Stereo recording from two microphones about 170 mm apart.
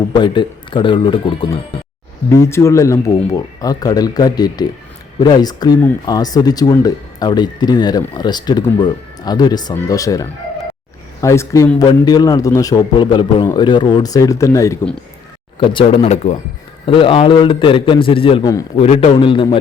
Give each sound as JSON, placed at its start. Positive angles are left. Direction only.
{"t": 0.1, "sound": "speech", "side_deg": 25}
{"t": 2.5, "sound": "speech", "side_deg": 15}
{"t": 15.5, "sound": "a man's voice", "side_deg": 35}